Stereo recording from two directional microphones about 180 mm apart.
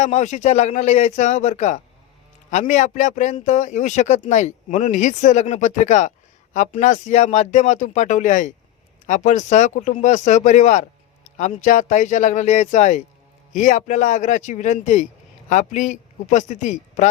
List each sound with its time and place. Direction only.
0.0 s speech: 40° left (ahead or behind)